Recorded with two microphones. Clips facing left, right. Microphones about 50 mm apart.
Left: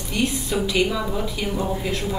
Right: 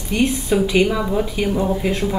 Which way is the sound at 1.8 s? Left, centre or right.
Right.